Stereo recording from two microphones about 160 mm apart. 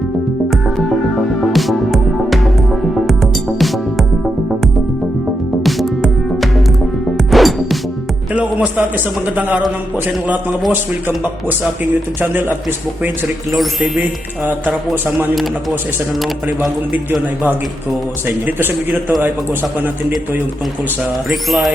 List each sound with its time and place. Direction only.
1.4 s music: centre (ahead or behind)
5.6 s music: centre (ahead or behind)
8.4 s a man's voice: 10° right (ahead or behind)
12.2 s a man's voice: 10° right (ahead or behind)
13.5 s speech: centre (ahead or behind)
18.3 s a man's voice: 10° right (ahead or behind)
21.2 s speech: centre (ahead or behind)